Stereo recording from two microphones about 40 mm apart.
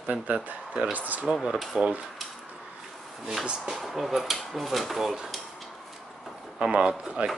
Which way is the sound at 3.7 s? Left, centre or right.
Centre.